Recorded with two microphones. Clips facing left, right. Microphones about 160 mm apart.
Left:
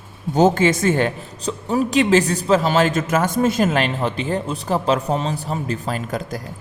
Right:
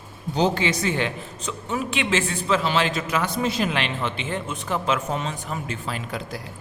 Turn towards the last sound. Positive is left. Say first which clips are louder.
# left 5 dB
turn(degrees=45)  # may be behind; listen again after turning